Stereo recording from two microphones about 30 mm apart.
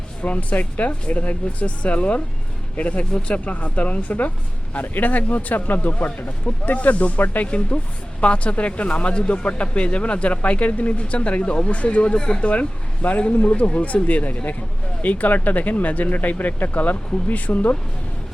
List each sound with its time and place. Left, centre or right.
0.2 s speech: left
3.0 s speech: left
3.2 s speech: left
4.7 s speech: left
6.5 s speech: left
6.8 s speech: left
7.4 s speech: left
12.0 s speech: left
12.5 s speech: left
15.7 s speech: left